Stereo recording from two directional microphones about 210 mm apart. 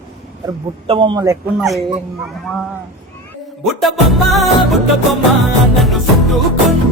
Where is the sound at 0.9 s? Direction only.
25° right (ahead or behind).